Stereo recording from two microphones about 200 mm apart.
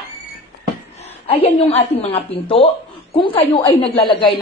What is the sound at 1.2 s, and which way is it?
A woman's voice, 30° left (ahead or behind).